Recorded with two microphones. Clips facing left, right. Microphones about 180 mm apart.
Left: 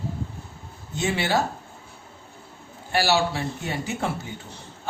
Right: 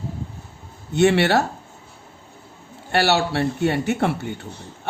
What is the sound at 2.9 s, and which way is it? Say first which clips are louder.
Speech: right 3 dB; 65° right (ahead or behind).